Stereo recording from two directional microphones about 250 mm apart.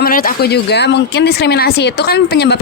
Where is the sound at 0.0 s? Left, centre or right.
Left.